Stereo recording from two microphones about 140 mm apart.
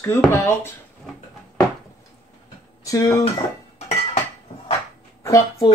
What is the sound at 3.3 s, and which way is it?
Dishes, 50° left (ahead or behind).